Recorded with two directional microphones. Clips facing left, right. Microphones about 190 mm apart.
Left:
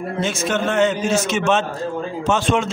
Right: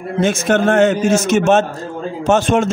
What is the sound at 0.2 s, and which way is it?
A man's voice, 50° right (ahead or behind).